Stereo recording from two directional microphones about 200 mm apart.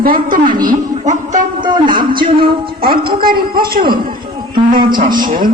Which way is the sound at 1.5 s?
25° right (ahead or behind).